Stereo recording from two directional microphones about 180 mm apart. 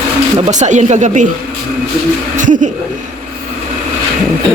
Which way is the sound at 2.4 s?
45° right (ahead or behind).